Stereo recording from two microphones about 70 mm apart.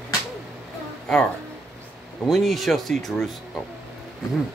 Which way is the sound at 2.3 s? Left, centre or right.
Centre.